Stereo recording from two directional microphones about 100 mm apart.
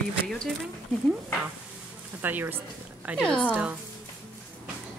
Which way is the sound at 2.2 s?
20° right (ahead or behind).